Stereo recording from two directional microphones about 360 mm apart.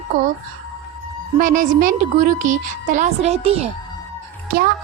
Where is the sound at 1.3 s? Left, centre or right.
Right.